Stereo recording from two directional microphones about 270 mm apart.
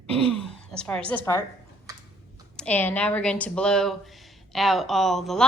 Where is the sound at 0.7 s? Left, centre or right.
Centre.